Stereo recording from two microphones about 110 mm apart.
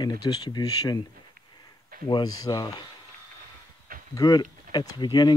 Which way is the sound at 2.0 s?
35° left (ahead or behind).